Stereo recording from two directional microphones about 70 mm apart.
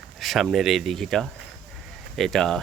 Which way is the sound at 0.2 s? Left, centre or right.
Centre.